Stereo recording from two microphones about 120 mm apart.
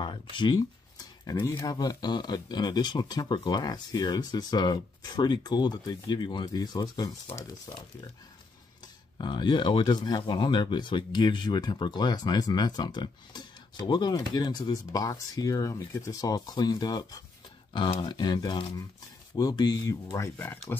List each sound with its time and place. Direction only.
0.0 s a sound: 40° left (ahead or behind)
1.3 s speech: 20° left (ahead or behind)
8.8 s speech: 40° left (ahead or behind); by 20.7 s 20° left (ahead or behind)